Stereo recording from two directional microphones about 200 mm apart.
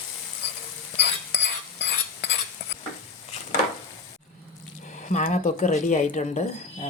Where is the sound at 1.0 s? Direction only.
60° left (ahead or behind).